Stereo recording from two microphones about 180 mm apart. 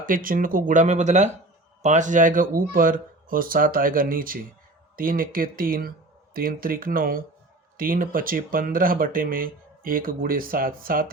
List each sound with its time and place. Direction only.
0.0 s speech: 50° right (ahead or behind)